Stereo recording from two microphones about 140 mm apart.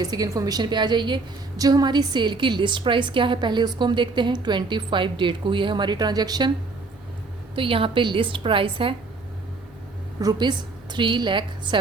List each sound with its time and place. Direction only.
0.0 s a woman's voice: 25° right (ahead or behind)
7.5 s a woman's voice: 40° right (ahead or behind)
10.2 s a woman's voice: 30° right (ahead or behind)